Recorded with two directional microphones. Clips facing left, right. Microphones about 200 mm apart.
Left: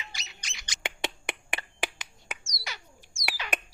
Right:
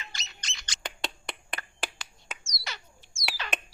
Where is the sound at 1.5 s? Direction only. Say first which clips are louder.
Left 1 dB; 15° left (ahead or behind).